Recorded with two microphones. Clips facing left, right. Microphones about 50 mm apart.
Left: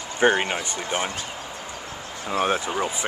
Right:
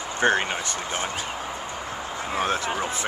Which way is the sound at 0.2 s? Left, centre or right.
Centre.